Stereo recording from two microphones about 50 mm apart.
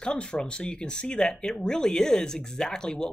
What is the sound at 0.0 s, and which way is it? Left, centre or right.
Speech, centre.